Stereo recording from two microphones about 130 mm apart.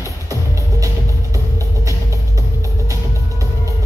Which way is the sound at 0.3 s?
25° right (ahead or behind).